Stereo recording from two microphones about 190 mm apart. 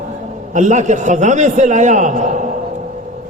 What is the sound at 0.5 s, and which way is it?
A man's voice, 40° right (ahead or behind).